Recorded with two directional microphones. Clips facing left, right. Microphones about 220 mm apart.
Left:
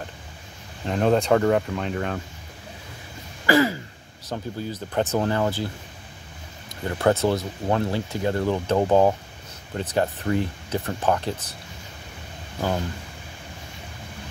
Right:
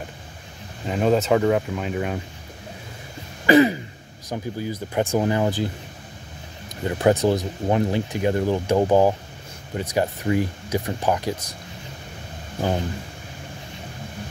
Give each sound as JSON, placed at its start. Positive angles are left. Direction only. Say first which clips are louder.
{"t": 0.8, "sound": "speech", "louder": "right 1 dB", "side_deg": -5}
{"t": 3.4, "sound": "throat clearing", "louder": "right 4 dB", "side_deg": -20}
{"t": 4.3, "sound": "speech", "louder": "right 2 dB", "side_deg": -10}
{"t": 6.8, "sound": "speech", "louder": "right 2 dB", "side_deg": -15}